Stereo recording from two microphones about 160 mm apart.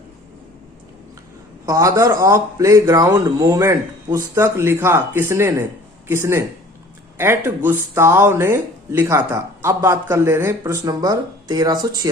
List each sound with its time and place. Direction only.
1.6 s a man's voice: 20° right (ahead or behind)